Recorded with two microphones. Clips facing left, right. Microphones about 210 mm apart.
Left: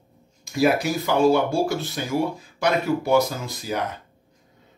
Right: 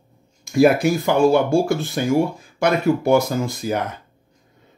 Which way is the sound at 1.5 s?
50° right (ahead or behind).